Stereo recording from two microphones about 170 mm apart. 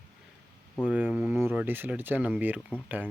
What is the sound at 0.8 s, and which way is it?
Speech, 5° right (ahead or behind).